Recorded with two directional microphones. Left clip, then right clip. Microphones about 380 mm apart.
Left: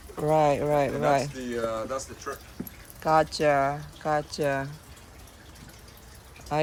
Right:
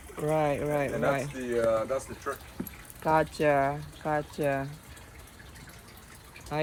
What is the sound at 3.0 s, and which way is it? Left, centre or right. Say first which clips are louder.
Speech: left 3 dB; centre.